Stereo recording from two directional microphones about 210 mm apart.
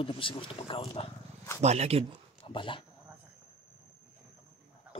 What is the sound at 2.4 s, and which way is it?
Speech, 25° left (ahead or behind).